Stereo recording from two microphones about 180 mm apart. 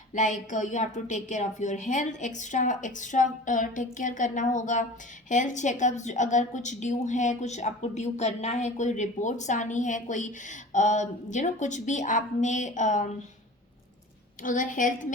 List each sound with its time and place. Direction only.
0.1 s a woman's voice: 45° left (ahead or behind)
14.4 s a woman's voice: 45° left (ahead or behind)